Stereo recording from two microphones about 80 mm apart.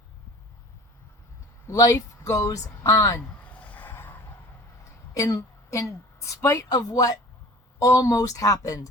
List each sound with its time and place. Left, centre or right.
1.6 s speech: left
3.4 s a sound: centre
5.1 s a woman's voice: left